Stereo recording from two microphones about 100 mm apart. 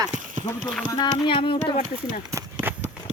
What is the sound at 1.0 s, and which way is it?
Speech, 55° left (ahead or behind).